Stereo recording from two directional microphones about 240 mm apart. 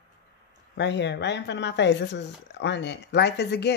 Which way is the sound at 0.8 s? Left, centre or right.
Left.